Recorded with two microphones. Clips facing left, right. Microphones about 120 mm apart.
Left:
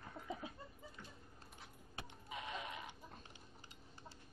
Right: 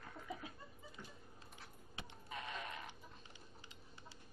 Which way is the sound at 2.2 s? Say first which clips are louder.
Even; 15° left (ahead or behind).